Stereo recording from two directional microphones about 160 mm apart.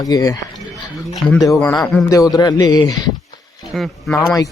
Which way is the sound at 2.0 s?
20° left (ahead or behind).